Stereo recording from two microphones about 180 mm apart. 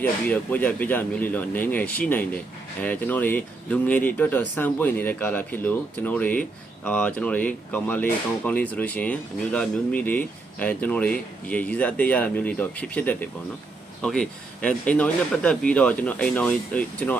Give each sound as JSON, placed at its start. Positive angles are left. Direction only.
{"t": 0.0, "sound": "speech", "side_deg": 10}